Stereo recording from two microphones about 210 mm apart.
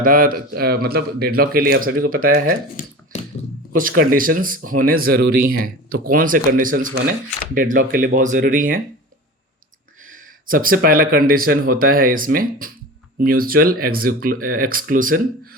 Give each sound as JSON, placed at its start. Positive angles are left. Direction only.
{"t": 0.0, "sound": "speech", "side_deg": -40}
{"t": 3.8, "sound": "speech", "side_deg": -40}
{"t": 10.0, "sound": "speech", "side_deg": -40}